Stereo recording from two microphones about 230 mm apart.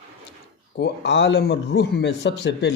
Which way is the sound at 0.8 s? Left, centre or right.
Left.